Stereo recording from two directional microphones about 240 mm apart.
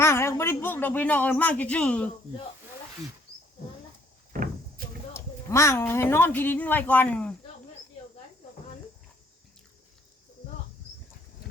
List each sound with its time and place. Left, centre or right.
0.0 s speech: centre
4.3 s door: right
5.1 s speech: centre